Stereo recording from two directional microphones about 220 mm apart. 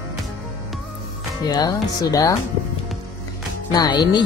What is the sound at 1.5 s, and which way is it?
Speech, 20° left (ahead or behind).